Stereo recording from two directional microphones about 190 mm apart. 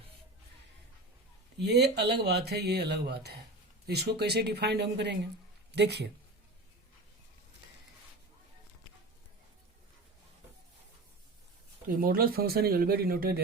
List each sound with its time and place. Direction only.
1.5 s speech: 60° right (ahead or behind)
11.9 s speech: 50° right (ahead or behind)